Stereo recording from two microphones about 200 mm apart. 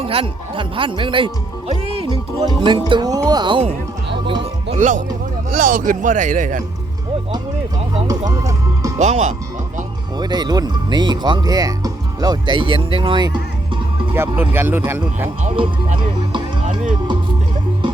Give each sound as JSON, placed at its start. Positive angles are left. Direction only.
{"t": 0.0, "sound": "speech", "side_deg": -30}
{"t": 4.3, "sound": "music", "side_deg": -25}
{"t": 4.8, "sound": "speech", "side_deg": -40}
{"t": 7.9, "sound": "speech", "side_deg": -20}
{"t": 9.0, "sound": "speech", "side_deg": -35}
{"t": 10.2, "sound": "speech", "side_deg": -20}
{"t": 14.1, "sound": "speech", "side_deg": -10}
{"t": 15.4, "sound": "speech", "side_deg": -35}